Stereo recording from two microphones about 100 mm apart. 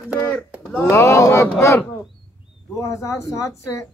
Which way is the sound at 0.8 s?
30° left (ahead or behind).